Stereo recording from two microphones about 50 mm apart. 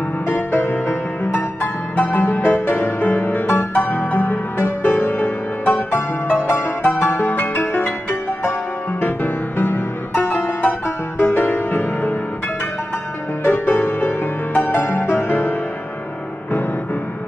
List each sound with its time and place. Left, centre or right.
0.3 s music: left
13.4 s music: left